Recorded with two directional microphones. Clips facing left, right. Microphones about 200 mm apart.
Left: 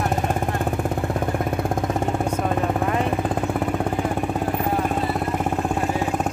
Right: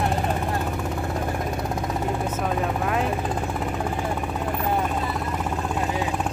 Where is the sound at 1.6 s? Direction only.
50° left (ahead or behind).